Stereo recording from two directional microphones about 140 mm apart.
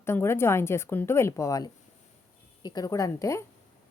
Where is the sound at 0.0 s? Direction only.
20° left (ahead or behind).